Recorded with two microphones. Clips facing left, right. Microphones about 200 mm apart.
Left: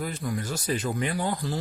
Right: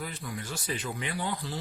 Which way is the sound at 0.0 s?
45° left (ahead or behind).